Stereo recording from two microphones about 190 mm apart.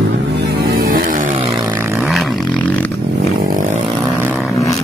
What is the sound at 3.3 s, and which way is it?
Chainsaw, 50° right (ahead or behind).